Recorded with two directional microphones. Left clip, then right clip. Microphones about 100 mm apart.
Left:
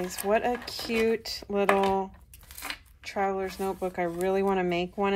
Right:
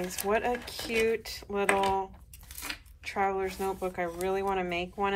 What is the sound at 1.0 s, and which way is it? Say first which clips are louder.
Speech: left 3 dB; 45° left (ahead or behind).